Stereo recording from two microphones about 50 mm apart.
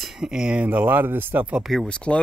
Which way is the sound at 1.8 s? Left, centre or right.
Left.